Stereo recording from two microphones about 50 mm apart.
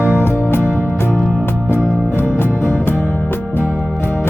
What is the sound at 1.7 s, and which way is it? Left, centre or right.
Music, centre.